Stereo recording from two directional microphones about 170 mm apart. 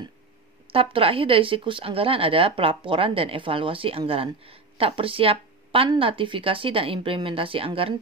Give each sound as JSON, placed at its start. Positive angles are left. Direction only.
{"t": 0.7, "sound": "speech", "side_deg": -30}